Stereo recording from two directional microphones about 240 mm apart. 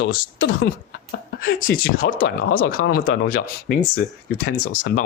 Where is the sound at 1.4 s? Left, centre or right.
Left.